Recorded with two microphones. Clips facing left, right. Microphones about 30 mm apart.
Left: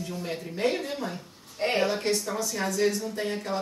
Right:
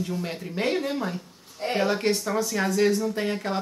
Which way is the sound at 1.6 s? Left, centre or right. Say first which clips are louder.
Left 2 dB; left.